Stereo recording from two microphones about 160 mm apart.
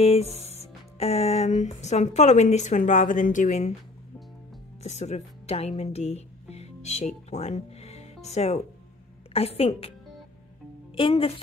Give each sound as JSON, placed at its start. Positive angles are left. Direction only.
{"t": 0.0, "sound": "music", "side_deg": 40}
{"t": 0.6, "sound": "speech", "side_deg": 40}
{"t": 4.8, "sound": "a woman's voice", "side_deg": 45}
{"t": 11.0, "sound": "a woman's voice", "side_deg": 35}